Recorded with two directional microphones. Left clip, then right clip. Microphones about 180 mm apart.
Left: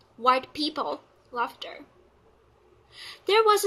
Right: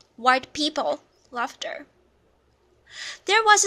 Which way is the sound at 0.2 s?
45° right (ahead or behind).